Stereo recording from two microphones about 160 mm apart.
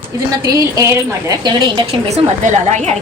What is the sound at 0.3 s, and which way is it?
Speech, 25° right (ahead or behind).